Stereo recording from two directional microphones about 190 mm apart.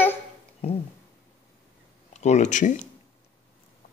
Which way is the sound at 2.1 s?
35° left (ahead or behind).